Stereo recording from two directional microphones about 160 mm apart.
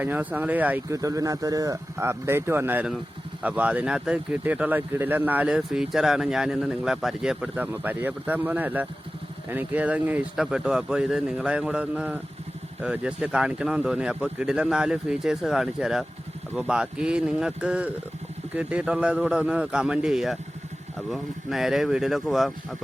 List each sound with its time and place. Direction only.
0.0 s speech: 10° right (ahead or behind)
0.9 s speech: 20° right (ahead or behind); by 22.8 s centre (ahead or behind)